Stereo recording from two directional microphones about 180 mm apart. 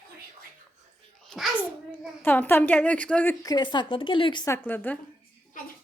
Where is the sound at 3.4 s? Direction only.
25° left (ahead or behind).